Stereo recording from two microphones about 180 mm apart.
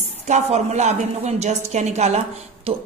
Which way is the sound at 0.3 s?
40° right (ahead or behind).